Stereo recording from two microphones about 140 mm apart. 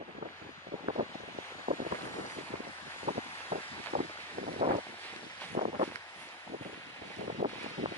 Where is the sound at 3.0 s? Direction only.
60° right (ahead or behind).